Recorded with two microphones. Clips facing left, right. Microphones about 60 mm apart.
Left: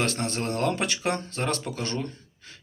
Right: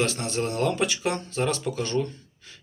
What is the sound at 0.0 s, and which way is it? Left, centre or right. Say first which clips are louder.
Speech: right 1 dB; left.